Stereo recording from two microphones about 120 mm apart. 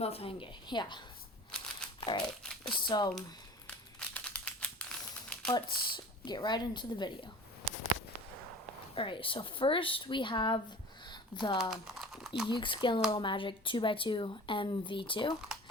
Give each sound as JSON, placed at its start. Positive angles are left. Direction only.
{"t": 0.0, "sound": "speech", "side_deg": 55}
{"t": 2.0, "sound": "crumpling", "side_deg": 40}
{"t": 2.2, "sound": "speech", "side_deg": 5}
{"t": 2.6, "sound": "speech", "side_deg": 40}
{"t": 4.1, "sound": "typewriter", "side_deg": 10}
{"t": 5.5, "sound": "speech", "side_deg": 40}
{"t": 9.0, "sound": "speech", "side_deg": 45}
{"t": 11.0, "sound": "a sound", "side_deg": 40}
{"t": 11.7, "sound": "crumpling", "side_deg": -5}
{"t": 12.5, "sound": "speech", "side_deg": 40}